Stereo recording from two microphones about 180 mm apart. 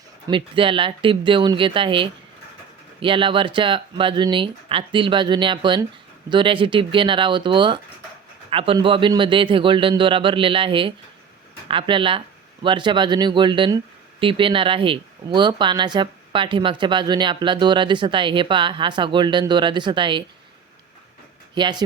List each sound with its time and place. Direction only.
0.3 s speech: 30° right (ahead or behind)
21.5 s speech: 25° right (ahead or behind)